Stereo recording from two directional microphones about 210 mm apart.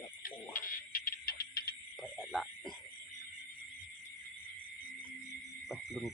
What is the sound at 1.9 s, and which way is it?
Frog, 5° right (ahead or behind).